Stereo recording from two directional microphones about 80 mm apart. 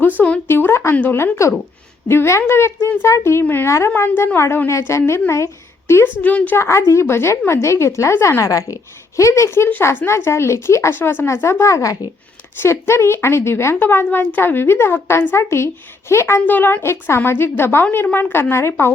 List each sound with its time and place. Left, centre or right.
0.4 s a woman's voice: left
6.2 s a woman's voice: centre
6.6 s a woman's voice: left
11.6 s a woman's voice: left
16.5 s a woman's voice: left